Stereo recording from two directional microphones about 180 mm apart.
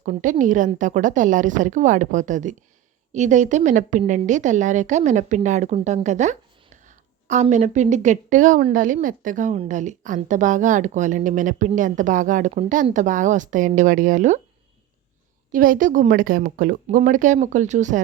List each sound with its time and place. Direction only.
0.0 s a woman's voice: 45° right (ahead or behind)
6.8 s a sound: 40° right (ahead or behind)
7.5 s a woman's voice: 40° right (ahead or behind)
15.5 s a woman's voice: 50° right (ahead or behind)